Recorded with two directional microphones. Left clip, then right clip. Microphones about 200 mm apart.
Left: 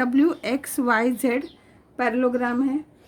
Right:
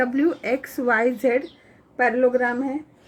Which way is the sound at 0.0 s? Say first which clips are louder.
Even; 55° left (ahead or behind).